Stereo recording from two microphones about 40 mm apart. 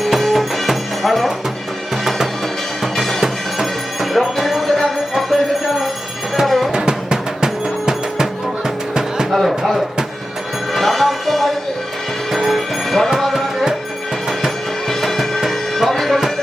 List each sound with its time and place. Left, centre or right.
0.0 s music: centre
2.8 s music: centre
6.7 s music: centre
9.3 s a sound: centre
10.8 s music: centre
12.3 s a sound: centre
13.1 s music: centre
14.8 s music: centre